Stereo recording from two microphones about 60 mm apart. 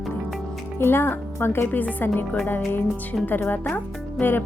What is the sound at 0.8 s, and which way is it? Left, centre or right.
Speech, left.